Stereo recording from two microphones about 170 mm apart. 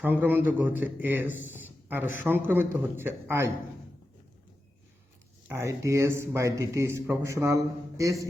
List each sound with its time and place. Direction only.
0.0 s speech: 10° right (ahead or behind)
5.5 s speech: 15° right (ahead or behind)